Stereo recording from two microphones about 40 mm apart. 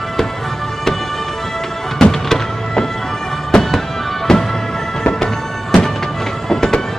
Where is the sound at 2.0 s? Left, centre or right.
Centre.